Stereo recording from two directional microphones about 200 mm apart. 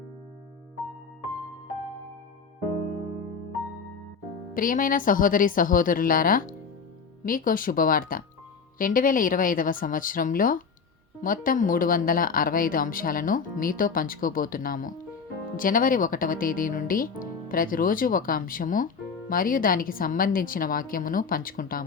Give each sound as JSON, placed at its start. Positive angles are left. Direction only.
{"t": 4.5, "sound": "speech", "side_deg": 45}